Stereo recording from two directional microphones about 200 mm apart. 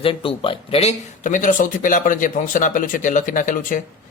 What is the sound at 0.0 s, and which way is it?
Speech, 25° left (ahead or behind).